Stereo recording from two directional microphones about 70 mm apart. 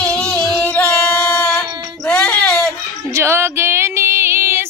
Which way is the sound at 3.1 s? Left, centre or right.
Right.